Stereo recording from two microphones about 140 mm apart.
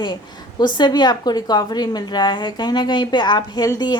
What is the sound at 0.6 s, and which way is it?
A woman's voice, 30° left (ahead or behind).